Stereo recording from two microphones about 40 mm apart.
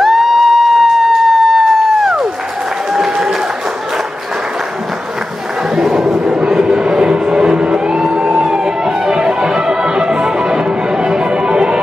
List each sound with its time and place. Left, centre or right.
0.0 s music: centre
5.8 s crowd: centre
6.4 s music: centre